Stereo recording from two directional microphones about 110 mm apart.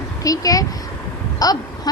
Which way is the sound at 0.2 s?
35° left (ahead or behind).